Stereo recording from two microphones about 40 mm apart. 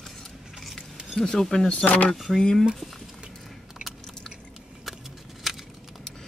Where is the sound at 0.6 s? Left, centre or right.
Centre.